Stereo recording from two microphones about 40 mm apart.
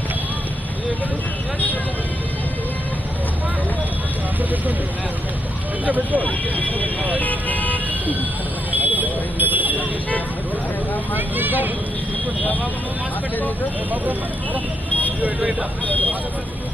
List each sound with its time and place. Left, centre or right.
6.2 s vehicle: left
8.7 s vehicle: right
11.1 s vehicle: right
15.9 s vehicle: left